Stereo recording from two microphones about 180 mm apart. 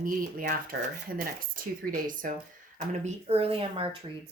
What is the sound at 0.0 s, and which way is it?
Speech, 50° right (ahead or behind).